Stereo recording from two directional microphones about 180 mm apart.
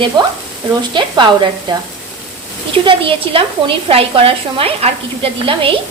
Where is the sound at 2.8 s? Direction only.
30° right (ahead or behind).